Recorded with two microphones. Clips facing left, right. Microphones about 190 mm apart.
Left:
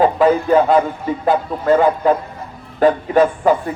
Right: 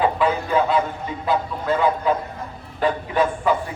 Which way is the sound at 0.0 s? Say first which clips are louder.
Left 7 dB; 45° left (ahead or behind).